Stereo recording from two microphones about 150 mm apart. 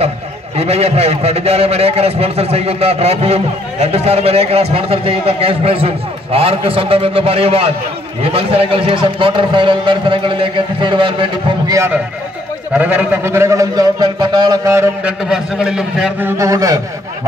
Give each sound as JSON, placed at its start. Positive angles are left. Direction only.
{"t": 0.6, "sound": "a man's voice", "side_deg": -45}
{"t": 12.7, "sound": "a man's voice", "side_deg": -10}
{"t": 15.0, "sound": "a man's voice", "side_deg": -5}